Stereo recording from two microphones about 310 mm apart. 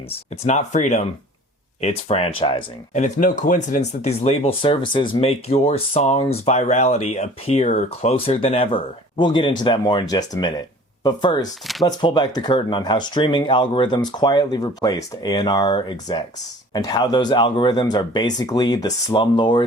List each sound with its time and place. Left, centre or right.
0.4 s speech: left